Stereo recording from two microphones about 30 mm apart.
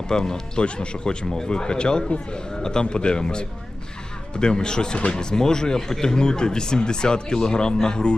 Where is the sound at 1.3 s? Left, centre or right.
Left.